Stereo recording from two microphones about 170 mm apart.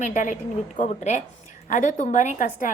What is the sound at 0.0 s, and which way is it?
A woman's voice, 50° left (ahead or behind).